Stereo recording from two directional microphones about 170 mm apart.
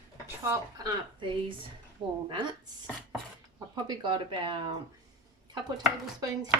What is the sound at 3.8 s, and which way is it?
Speech, 30° right (ahead or behind).